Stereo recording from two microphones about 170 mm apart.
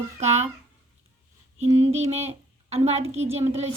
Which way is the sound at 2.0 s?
40° right (ahead or behind).